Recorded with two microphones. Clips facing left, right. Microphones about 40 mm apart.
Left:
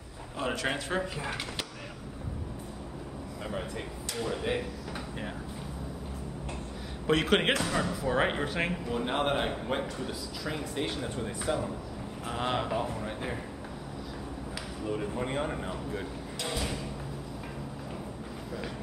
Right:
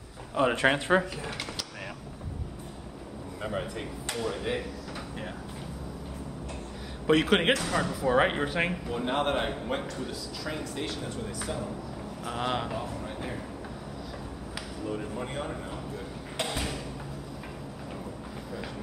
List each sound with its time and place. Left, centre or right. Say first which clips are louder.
0.4 s speech: right 7 dB; right
3.4 s speech: right 3 dB; centre
4.2 s speech: even; centre
7.1 s a man's voice: right 2 dB; centre
10.9 s speech: left 1 dB; left
12.3 s a man's voice: even; centre
13.0 s a sound: left 1 dB; centre
15.1 s speech: left 2 dB; left
16.3 s thump: right 2 dB; right